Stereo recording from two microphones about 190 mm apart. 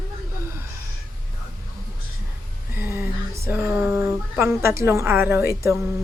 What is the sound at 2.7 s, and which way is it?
A woman's voice, 10° right (ahead or behind).